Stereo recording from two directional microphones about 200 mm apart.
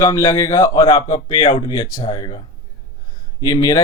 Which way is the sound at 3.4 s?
20° left (ahead or behind).